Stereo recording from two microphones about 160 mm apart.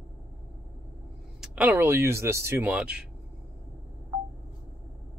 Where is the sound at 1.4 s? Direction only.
10° right (ahead or behind).